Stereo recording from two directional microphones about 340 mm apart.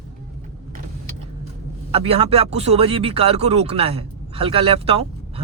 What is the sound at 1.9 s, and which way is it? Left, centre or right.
Speech, centre.